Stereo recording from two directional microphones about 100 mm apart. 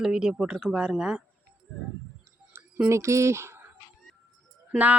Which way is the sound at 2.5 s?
25° right (ahead or behind).